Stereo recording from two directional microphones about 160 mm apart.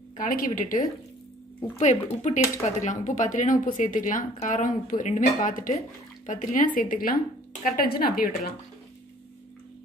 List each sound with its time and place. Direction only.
0.2 s speech: 60° left (ahead or behind)